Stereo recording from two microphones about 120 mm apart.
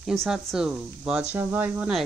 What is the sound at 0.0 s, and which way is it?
Speech, centre (ahead or behind).